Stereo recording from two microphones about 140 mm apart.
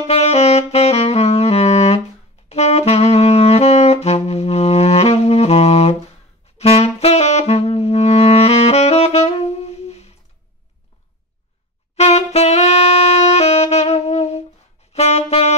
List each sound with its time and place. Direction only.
0.0 s saxophone: 50° left (ahead or behind)
12.0 s saxophone: 50° left (ahead or behind)